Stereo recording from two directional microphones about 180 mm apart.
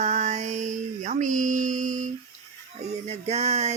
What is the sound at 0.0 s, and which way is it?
Music, 40° right (ahead or behind).